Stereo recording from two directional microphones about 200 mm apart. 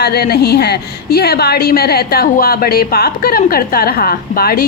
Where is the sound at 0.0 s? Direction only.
50° left (ahead or behind).